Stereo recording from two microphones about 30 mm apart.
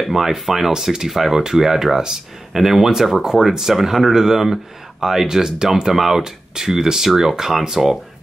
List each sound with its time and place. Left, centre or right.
0.1 s speech: centre
5.9 s speech: centre
6.2 s speech: centre